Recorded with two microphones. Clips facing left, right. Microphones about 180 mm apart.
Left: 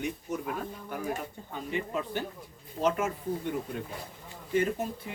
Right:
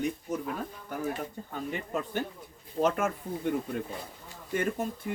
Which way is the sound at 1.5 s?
45° right (ahead or behind).